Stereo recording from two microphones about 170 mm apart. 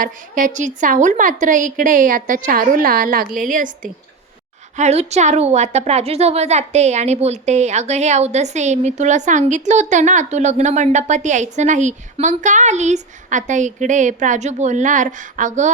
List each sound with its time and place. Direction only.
0.0 s a woman's voice: 50° right (ahead or behind)
4.8 s a woman's voice: 40° right (ahead or behind)